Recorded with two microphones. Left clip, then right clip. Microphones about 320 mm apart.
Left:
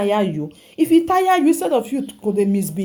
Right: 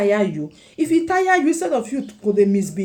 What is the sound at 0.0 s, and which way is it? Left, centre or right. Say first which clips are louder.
Speech: right 1 dB; left.